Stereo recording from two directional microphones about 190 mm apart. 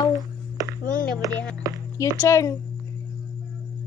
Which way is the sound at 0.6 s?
20° right (ahead or behind).